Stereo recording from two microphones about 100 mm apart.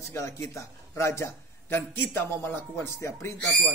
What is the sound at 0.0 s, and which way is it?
A man's voice, 30° left (ahead or behind).